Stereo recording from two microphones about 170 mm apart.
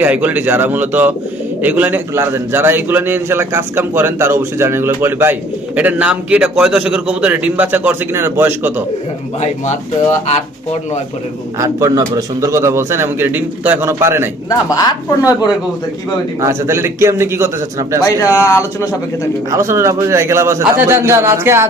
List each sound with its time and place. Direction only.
0.0 s a man's voice: 10° right (ahead or behind)
11.6 s a man's voice: 20° right (ahead or behind)
14.7 s speech: 20° left (ahead or behind)
16.4 s a man's voice: 15° right (ahead or behind)
18.0 s speech: 20° left (ahead or behind)
19.5 s a man's voice: 15° right (ahead or behind)